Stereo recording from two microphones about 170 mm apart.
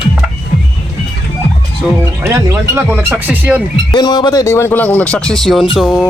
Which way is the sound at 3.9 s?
25° left (ahead or behind).